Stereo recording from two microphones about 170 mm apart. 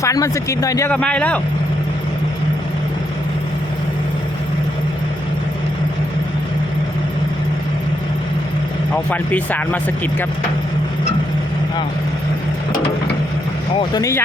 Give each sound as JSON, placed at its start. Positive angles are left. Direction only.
{"t": 0.0, "sound": "speech", "side_deg": 20}
{"t": 0.9, "sound": "speech", "side_deg": 5}
{"t": 9.0, "sound": "speech", "side_deg": 10}
{"t": 13.7, "sound": "speech", "side_deg": 25}